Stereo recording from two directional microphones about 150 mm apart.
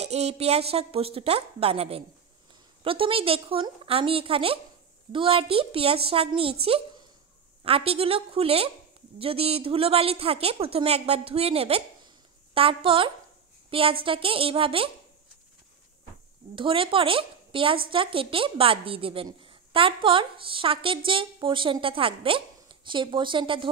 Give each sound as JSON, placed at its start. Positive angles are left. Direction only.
{"t": 0.0, "sound": "a woman's voice", "side_deg": -45}
{"t": 16.5, "sound": "a woman's voice", "side_deg": -35}